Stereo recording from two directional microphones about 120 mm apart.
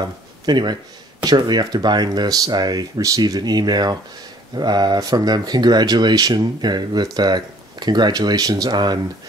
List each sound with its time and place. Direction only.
0.0 s speech: 35° right (ahead or behind)